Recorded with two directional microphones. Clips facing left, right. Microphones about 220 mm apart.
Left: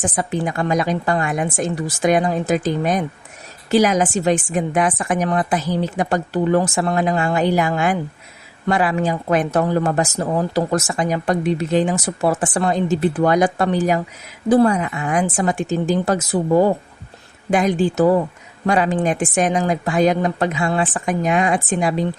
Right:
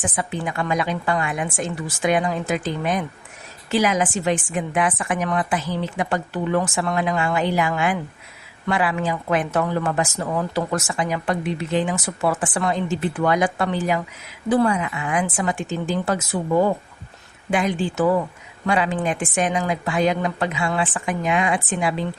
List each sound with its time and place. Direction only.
0.0 s speech: 40° left (ahead or behind)